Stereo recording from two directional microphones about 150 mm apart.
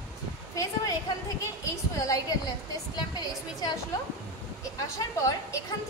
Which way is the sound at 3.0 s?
25° left (ahead or behind).